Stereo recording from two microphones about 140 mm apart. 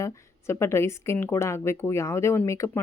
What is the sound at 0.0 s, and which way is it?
Speech, 20° left (ahead or behind).